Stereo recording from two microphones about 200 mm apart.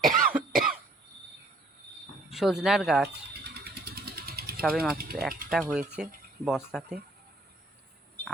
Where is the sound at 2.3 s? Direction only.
Centre (ahead or behind).